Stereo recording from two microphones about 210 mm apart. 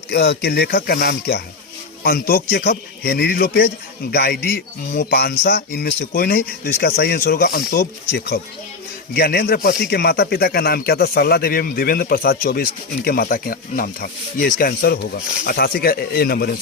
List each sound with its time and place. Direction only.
0.1 s speech: 50° left (ahead or behind)
9.1 s speech: 50° left (ahead or behind)